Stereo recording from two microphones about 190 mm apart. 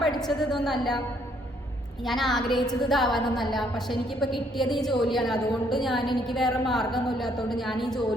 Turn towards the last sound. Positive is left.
turn(degrees=0)  # may be behind; listen again after turning